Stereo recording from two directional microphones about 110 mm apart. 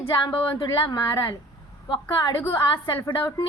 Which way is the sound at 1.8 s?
50° left (ahead or behind).